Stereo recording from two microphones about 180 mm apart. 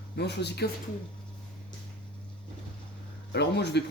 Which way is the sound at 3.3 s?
70° left (ahead or behind).